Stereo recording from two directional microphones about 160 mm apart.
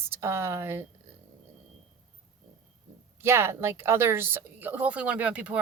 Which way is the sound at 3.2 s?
15° right (ahead or behind).